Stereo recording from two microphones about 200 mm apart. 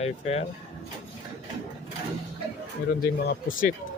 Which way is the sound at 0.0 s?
30° left (ahead or behind).